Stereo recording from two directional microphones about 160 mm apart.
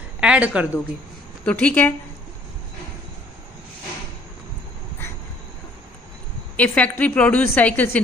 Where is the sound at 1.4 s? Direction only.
10° left (ahead or behind).